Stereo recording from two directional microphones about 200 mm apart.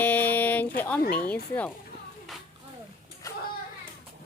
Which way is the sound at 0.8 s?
10° left (ahead or behind).